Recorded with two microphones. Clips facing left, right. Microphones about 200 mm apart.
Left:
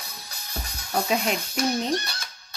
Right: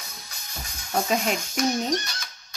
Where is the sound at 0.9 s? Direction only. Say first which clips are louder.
Even; centre (ahead or behind).